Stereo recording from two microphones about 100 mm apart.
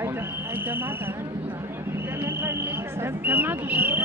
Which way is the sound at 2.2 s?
25° right (ahead or behind).